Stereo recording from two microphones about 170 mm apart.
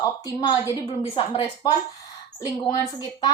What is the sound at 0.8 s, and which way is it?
Speech, 30° left (ahead or behind).